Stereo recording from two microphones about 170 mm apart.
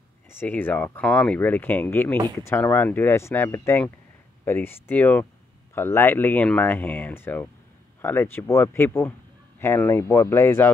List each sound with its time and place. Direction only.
0.3 s speech: 10° left (ahead or behind)